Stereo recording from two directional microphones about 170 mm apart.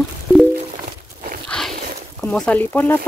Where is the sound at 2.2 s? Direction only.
10° left (ahead or behind).